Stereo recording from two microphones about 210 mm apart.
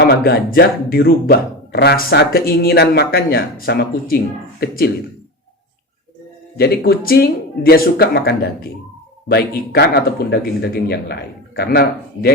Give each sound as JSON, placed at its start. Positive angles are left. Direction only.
{"t": 0.3, "sound": "speech", "side_deg": 45}
{"t": 6.6, "sound": "speech", "side_deg": 50}